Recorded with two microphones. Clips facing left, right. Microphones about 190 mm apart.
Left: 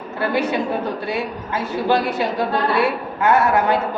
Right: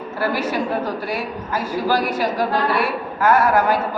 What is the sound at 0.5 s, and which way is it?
A woman's voice, 25° left (ahead or behind).